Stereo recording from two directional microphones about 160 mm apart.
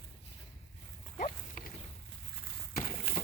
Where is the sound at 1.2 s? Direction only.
55° left (ahead or behind).